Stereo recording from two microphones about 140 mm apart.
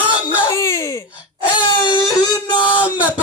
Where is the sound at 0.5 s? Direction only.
20° left (ahead or behind).